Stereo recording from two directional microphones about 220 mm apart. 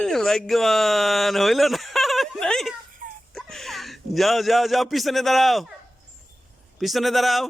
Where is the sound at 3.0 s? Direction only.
40° right (ahead or behind).